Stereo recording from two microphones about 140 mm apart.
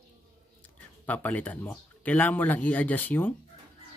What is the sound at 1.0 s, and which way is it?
Speech, 10° left (ahead or behind).